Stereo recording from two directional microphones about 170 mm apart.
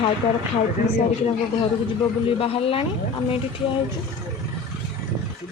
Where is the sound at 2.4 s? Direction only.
35° left (ahead or behind).